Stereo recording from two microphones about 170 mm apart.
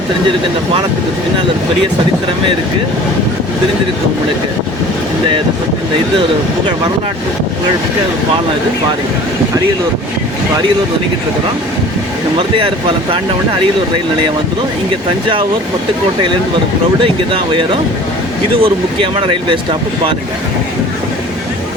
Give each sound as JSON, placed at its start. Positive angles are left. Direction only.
{"t": 12.4, "sound": "speech", "side_deg": -30}
{"t": 18.6, "sound": "speech", "side_deg": -30}